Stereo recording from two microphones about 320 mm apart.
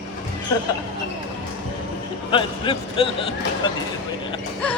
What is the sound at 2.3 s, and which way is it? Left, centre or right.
Speech, centre.